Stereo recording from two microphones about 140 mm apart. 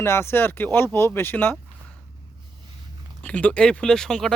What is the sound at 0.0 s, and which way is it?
Speech, 20° left (ahead or behind).